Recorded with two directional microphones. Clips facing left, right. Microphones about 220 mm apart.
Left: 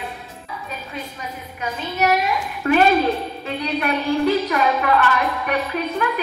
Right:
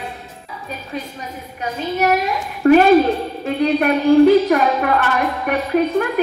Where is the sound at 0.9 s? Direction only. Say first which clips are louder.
Right 6 dB; 40° right (ahead or behind).